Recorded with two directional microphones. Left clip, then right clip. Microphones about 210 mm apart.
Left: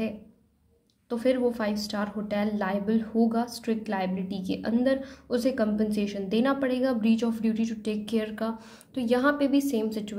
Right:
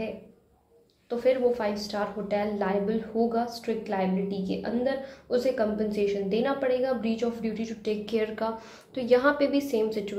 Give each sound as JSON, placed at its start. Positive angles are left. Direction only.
{"t": 1.0, "sound": "a woman's voice", "side_deg": 40}